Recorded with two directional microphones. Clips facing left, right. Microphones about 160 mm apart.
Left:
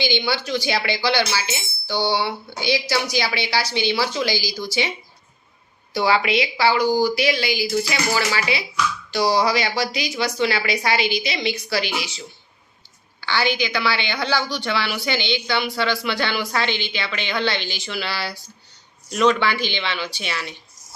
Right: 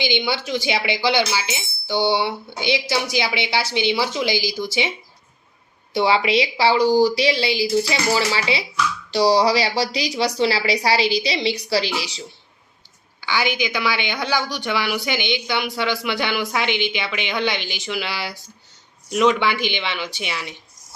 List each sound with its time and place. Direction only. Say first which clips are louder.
0.0 s speech: even; 20° right (ahead or behind)
13.2 s a woman's voice: even; 15° right (ahead or behind)